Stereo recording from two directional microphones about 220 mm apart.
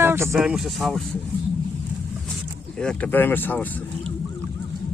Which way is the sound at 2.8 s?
5° left (ahead or behind).